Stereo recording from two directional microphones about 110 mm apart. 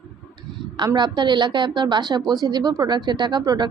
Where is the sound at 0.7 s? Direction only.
40° right (ahead or behind).